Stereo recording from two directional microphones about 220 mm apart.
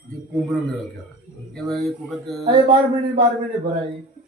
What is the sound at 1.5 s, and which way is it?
Speech, centre (ahead or behind).